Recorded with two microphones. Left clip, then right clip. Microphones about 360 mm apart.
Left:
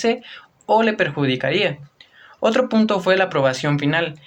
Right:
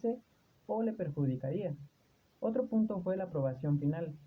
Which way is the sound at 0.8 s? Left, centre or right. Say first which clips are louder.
Left 18 dB; right.